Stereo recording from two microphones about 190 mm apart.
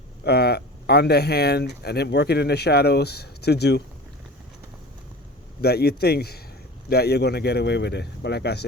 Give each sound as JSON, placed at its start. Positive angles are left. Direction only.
{"t": 0.3, "sound": "speech", "side_deg": 55}
{"t": 5.6, "sound": "speech", "side_deg": 55}